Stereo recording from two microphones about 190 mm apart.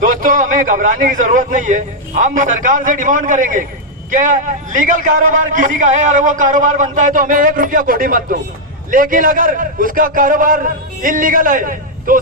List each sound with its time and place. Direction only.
0.0 s a man's voice: 45° right (ahead or behind)